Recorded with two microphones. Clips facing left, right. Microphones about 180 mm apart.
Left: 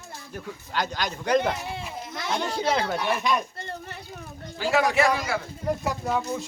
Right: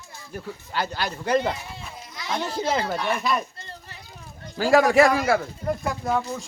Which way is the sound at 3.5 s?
60° left (ahead or behind).